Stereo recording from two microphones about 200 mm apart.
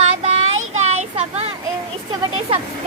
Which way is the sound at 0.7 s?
30° right (ahead or behind).